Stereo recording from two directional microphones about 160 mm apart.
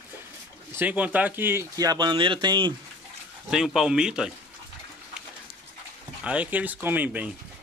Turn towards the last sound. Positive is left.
turn(degrees=-10)  # may be behind; listen again after turning